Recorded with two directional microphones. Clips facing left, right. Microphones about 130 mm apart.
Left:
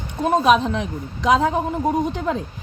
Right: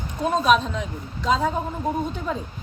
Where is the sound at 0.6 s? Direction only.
75° left (ahead or behind); by 2.3 s 90° left.